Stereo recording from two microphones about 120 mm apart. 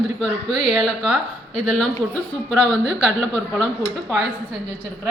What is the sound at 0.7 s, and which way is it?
Speech, 5° right (ahead or behind).